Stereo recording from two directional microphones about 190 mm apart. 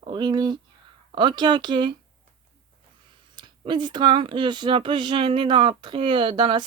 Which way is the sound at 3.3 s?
25° right (ahead or behind).